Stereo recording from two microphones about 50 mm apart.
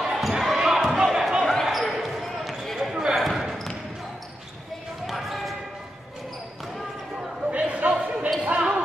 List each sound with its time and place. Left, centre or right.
0.0 s basketball bounce: centre
1.4 s basketball bounce: centre
2.9 s basketball bounce: centre
5.0 s basketball bounce: centre
7.5 s a sound: right
8.4 s basketball bounce: right